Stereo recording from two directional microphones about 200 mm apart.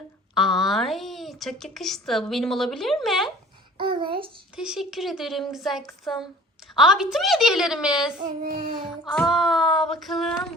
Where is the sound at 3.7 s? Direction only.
25° right (ahead or behind).